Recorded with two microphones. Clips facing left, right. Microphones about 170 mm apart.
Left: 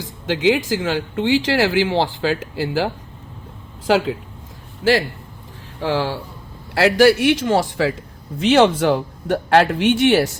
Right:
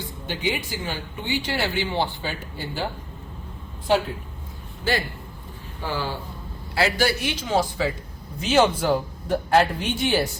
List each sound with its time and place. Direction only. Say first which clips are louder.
0.0 s a man's voice: left 9 dB; 90° left